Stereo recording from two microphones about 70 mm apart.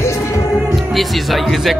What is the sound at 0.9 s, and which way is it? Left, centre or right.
Speech, centre.